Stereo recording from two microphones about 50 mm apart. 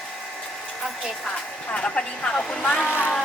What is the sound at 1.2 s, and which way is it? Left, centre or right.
Speech, left.